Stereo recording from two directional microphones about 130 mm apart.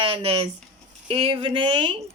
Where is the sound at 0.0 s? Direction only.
45° right (ahead or behind).